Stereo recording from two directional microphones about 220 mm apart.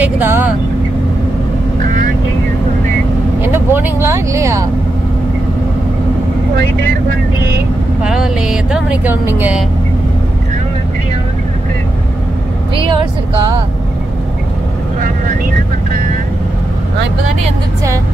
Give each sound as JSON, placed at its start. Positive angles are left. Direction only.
{"t": 0.0, "sound": "speech", "side_deg": -10}
{"t": 3.4, "sound": "speech", "side_deg": -10}
{"t": 8.0, "sound": "speech", "side_deg": 0}
{"t": 12.7, "sound": "speech", "side_deg": -20}